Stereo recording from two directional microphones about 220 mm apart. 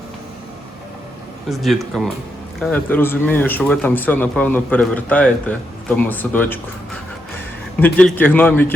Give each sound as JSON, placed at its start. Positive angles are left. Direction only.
{"t": 1.5, "sound": "speech", "side_deg": 0}
{"t": 7.8, "sound": "speech", "side_deg": 5}